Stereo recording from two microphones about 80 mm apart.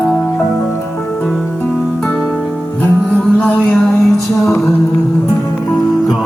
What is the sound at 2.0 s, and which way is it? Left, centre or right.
Music, centre.